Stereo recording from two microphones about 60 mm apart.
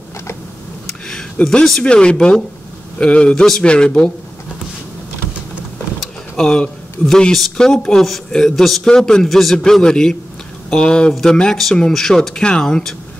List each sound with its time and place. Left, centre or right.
0.8 s speech: centre
6.3 s speech: centre